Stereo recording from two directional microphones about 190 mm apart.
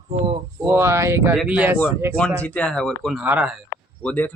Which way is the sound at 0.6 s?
15° right (ahead or behind).